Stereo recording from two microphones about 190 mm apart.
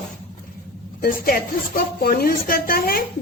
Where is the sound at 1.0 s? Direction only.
50° left (ahead or behind).